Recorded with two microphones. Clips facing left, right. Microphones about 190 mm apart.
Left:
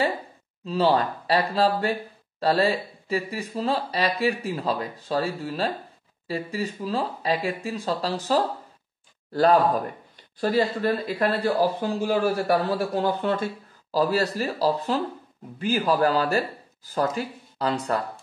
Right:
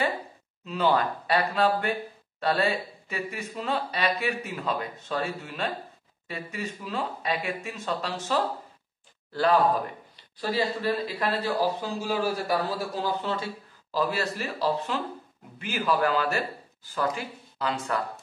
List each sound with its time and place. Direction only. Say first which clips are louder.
0.7 s a man's voice: left 3 dB; 35° left (ahead or behind); by 13.5 s 55° left (ahead or behind)
13.9 s speech: left 5 dB; 35° left (ahead or behind)